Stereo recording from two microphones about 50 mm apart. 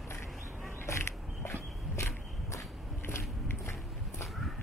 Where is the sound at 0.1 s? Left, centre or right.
Left.